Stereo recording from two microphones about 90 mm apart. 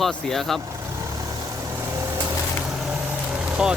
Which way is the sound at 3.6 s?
10° right (ahead or behind).